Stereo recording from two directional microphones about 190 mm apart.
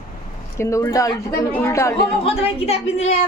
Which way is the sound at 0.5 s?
15° left (ahead or behind).